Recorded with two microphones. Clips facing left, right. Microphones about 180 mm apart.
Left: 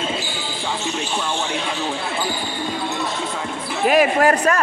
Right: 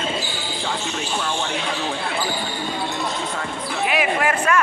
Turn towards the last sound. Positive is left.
turn(degrees=40)  # may be behind; listen again after turning